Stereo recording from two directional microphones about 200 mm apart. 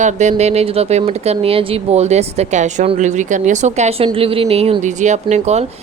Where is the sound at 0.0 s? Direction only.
35° right (ahead or behind).